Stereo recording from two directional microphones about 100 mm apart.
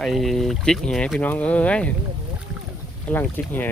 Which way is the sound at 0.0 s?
Centre (ahead or behind).